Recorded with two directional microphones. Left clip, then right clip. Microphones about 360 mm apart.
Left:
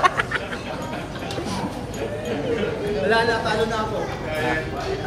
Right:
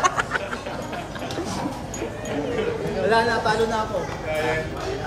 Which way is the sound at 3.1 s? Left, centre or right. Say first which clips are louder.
Right 1 dB; right.